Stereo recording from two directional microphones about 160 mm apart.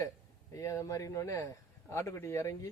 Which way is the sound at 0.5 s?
20° left (ahead or behind).